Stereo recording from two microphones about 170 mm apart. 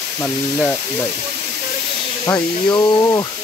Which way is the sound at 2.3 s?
20° left (ahead or behind).